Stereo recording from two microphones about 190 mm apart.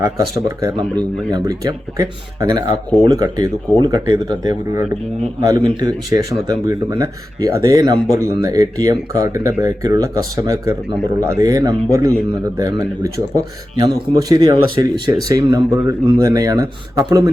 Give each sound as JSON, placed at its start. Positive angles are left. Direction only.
{"t": 0.0, "sound": "speech", "side_deg": -15}